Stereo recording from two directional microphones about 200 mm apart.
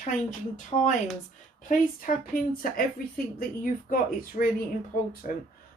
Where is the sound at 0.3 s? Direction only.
40° left (ahead or behind).